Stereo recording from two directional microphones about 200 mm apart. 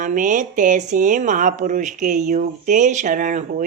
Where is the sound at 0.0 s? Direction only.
40° right (ahead or behind).